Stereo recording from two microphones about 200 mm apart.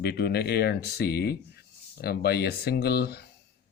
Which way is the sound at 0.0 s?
55° left (ahead or behind).